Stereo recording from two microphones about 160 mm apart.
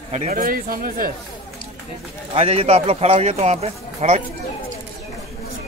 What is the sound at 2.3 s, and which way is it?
Speech, 40° right (ahead or behind).